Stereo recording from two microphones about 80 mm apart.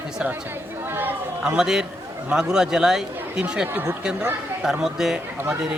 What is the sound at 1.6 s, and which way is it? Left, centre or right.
Speech, centre.